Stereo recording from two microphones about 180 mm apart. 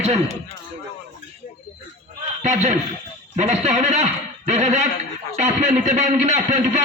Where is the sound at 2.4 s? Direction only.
40° right (ahead or behind).